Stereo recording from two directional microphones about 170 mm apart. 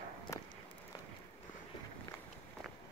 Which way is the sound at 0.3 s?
15° left (ahead or behind).